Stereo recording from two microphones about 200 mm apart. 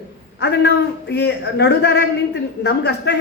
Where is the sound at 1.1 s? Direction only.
55° left (ahead or behind).